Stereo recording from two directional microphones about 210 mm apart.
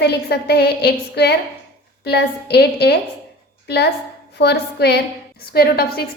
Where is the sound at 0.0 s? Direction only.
50° left (ahead or behind).